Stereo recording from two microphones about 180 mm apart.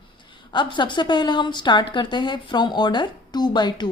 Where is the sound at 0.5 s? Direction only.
25° left (ahead or behind).